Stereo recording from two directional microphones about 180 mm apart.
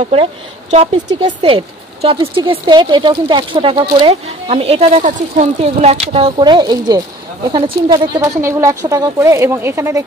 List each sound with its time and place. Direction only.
0.0 s speech: 30° right (ahead or behind); by 10.0 s 15° right (ahead or behind)